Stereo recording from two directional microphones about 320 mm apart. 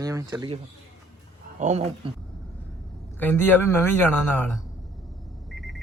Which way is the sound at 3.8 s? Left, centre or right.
Centre.